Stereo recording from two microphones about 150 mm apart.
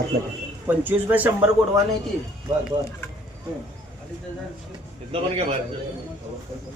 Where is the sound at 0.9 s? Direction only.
10° right (ahead or behind).